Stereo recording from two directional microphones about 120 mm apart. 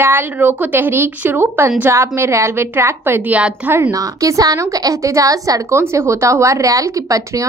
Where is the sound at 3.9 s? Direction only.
30° right (ahead or behind).